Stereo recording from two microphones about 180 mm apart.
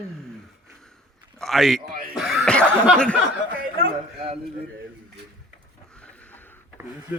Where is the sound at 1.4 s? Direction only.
Centre (ahead or behind).